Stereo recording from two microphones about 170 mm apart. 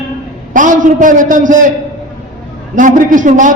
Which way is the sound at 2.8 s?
50° right (ahead or behind).